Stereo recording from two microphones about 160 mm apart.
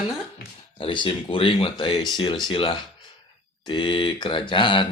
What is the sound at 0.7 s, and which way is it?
Speech, 30° left (ahead or behind).